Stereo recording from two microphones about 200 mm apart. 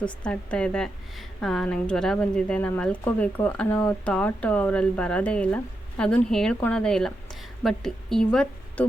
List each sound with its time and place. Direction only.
0.3 s speech: 5° left (ahead or behind)